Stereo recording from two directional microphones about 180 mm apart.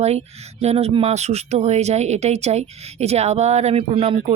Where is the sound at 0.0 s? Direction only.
35° right (ahead or behind).